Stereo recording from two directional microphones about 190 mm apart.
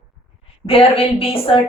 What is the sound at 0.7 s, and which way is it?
Speech, 30° left (ahead or behind).